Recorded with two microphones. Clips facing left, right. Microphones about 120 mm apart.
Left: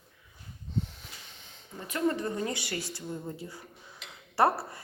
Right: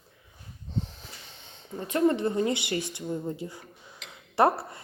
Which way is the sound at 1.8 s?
25° right (ahead or behind).